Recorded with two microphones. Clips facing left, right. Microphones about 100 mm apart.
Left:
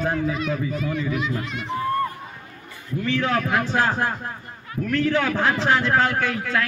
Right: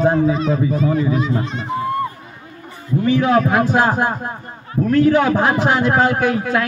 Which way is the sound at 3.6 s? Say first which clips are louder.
Right 6 dB; 20° right (ahead or behind).